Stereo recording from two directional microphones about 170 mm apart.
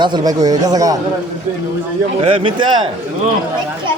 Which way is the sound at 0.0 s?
25° right (ahead or behind).